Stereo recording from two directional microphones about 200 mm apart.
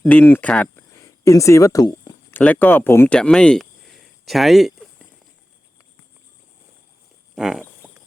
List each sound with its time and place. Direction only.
0.0 s speech: 10° left (ahead or behind)
2.3 s speech: 10° left (ahead or behind)
7.3 s speech: centre (ahead or behind)